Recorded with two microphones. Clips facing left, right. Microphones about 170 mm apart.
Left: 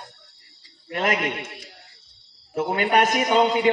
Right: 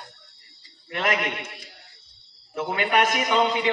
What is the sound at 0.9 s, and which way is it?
Speech, 40° left (ahead or behind).